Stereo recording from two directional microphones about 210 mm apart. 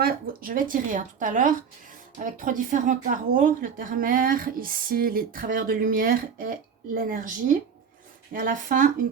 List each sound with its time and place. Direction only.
0.0 s speech: 40° right (ahead or behind)